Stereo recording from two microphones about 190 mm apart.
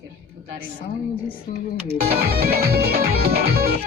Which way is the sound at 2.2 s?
55° right (ahead or behind).